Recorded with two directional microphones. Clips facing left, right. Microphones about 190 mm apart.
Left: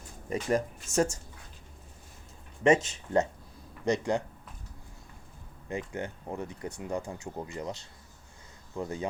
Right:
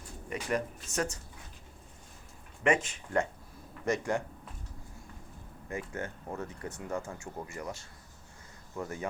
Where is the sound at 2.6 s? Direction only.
25° left (ahead or behind).